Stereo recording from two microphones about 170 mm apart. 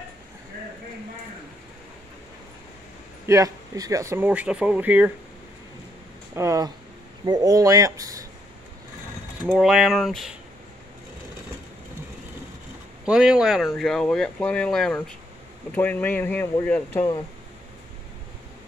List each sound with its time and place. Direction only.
3.3 s speech: 20° right (ahead or behind)
6.3 s speech: 15° right (ahead or behind)
9.5 s speech: 5° right (ahead or behind)
13.0 s speech: 5° right (ahead or behind); by 17.0 s 10° left (ahead or behind)